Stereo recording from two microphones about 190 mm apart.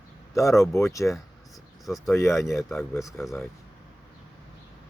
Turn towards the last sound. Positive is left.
turn(degrees=0)  # may be behind; listen again after turning